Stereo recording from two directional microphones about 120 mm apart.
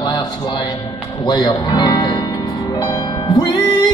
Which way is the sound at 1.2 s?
35° left (ahead or behind).